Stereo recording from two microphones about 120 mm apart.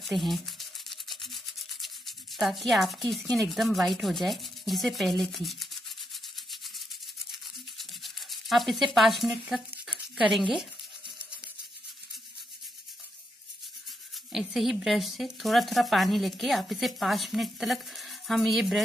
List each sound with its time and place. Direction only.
0.0 s rub: centre (ahead or behind)
7.2 s toothbrush: centre (ahead or behind)
10.1 s speech: centre (ahead or behind)
14.3 s speech: centre (ahead or behind)